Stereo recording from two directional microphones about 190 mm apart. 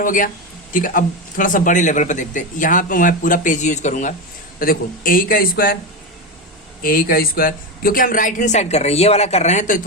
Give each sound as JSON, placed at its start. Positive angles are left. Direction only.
{"t": 0.0, "sound": "speech", "side_deg": 45}
{"t": 6.8, "sound": "speech", "side_deg": 50}